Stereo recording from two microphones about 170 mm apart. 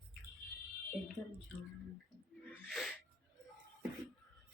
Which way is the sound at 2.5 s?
Centre (ahead or behind).